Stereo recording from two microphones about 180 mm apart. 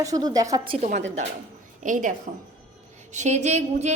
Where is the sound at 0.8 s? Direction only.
40° right (ahead or behind).